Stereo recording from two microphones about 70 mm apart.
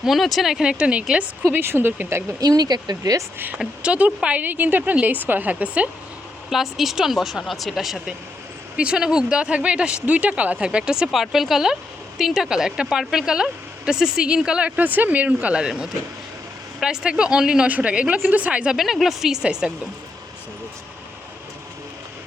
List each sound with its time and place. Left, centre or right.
0.0 s speech: centre
1.5 s speech: right
2.4 s speech: right
2.9 s speech: right
3.3 s speech: right
6.5 s speech: centre
8.7 s speech: centre
14.8 s speech: right
18.8 s speech: centre